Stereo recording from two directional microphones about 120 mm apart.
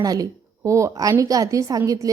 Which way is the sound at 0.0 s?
30° right (ahead or behind).